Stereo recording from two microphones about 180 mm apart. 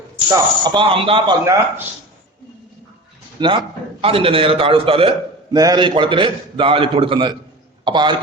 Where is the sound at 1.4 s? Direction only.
15° right (ahead or behind).